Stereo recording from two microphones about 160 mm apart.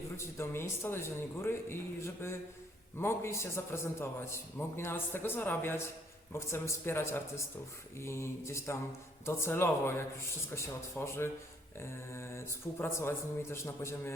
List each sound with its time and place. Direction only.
0.2 s a man's voice: 15° left (ahead or behind)